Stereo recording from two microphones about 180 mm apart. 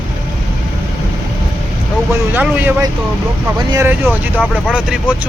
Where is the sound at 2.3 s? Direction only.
10° right (ahead or behind).